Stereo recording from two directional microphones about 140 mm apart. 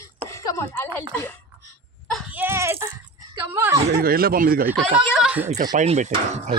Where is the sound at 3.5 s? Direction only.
20° right (ahead or behind).